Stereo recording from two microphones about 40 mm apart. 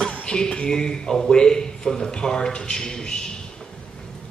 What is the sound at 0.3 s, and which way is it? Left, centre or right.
A man's voice, left.